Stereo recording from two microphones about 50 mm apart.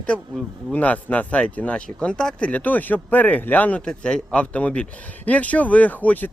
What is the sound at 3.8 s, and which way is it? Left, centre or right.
Speech, centre.